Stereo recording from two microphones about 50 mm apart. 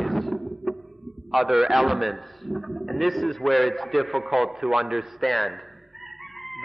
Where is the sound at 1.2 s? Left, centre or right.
Centre.